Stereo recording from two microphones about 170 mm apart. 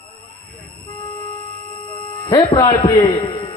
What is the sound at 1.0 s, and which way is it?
Tuning fork, 30° left (ahead or behind).